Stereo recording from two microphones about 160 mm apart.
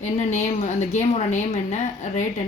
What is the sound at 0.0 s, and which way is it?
Speech, 50° left (ahead or behind).